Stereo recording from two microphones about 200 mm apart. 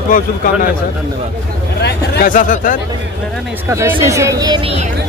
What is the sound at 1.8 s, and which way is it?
Speech, 50° left (ahead or behind).